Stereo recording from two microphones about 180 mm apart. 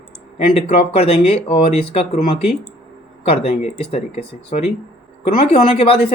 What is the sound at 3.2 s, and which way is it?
A woman's voice, 35° left (ahead or behind).